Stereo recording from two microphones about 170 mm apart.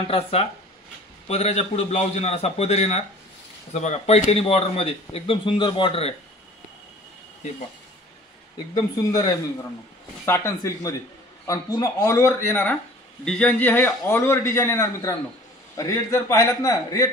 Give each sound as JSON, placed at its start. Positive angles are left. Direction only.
{"t": 0.1, "sound": "a man's voice", "side_deg": 35}
{"t": 8.7, "sound": "a man's voice", "side_deg": 20}